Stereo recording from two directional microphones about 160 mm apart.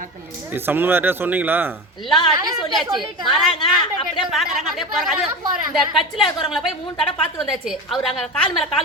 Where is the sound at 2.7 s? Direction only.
Centre (ahead or behind).